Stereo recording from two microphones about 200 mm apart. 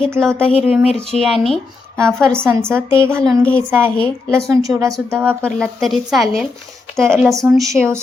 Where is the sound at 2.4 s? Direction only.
15° right (ahead or behind).